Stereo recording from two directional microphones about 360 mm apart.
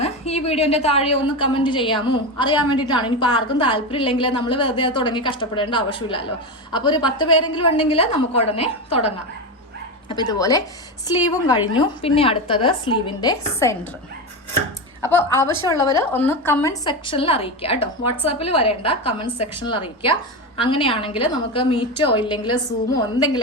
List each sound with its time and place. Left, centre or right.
0.0 s a woman's voice: centre
15.1 s a woman's voice: centre